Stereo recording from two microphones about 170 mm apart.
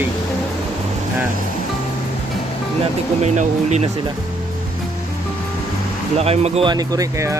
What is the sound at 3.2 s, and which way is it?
Speech, 45° right (ahead or behind).